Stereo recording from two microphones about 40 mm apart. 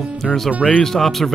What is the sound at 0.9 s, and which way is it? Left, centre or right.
Speech, centre.